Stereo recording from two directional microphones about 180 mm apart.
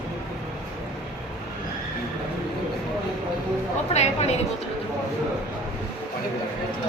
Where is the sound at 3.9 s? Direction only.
35° left (ahead or behind).